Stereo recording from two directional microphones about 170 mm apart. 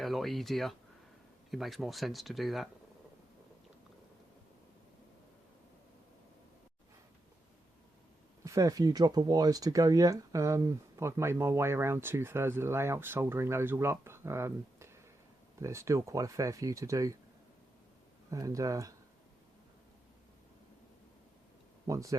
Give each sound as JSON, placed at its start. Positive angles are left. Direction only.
{"t": 0.0, "sound": "speech", "side_deg": 0}
{"t": 8.4, "sound": "speech", "side_deg": -20}
{"t": 18.3, "sound": "speech", "side_deg": -20}
{"t": 21.8, "sound": "speech", "side_deg": -20}